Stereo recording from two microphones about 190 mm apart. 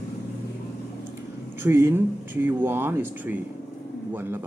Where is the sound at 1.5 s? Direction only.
10° right (ahead or behind).